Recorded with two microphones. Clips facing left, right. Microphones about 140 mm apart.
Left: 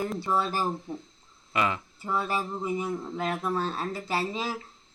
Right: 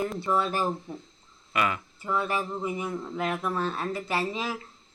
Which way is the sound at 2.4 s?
15° left (ahead or behind).